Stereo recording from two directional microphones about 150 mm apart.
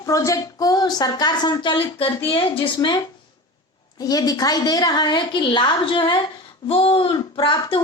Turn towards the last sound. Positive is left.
turn(degrees=35)  # may be behind; listen again after turning